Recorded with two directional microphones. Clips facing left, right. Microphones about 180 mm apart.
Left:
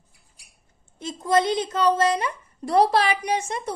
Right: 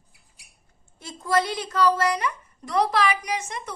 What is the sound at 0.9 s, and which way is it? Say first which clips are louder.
A woman's voice: left 3 dB; 20° left (ahead or behind).